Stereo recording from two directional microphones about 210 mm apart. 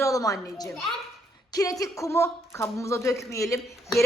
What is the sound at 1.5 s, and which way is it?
Speech, 15° left (ahead or behind).